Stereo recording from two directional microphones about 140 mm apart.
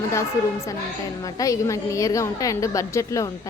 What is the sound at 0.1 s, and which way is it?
Speech, 20° left (ahead or behind).